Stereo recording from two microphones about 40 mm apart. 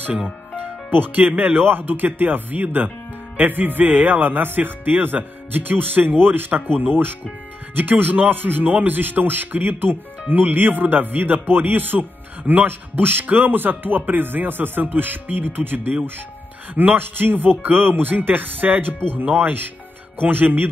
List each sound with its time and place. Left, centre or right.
0.9 s speech: right
1.6 s speech: right